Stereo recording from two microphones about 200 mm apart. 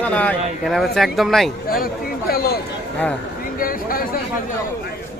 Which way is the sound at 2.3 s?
50° left (ahead or behind).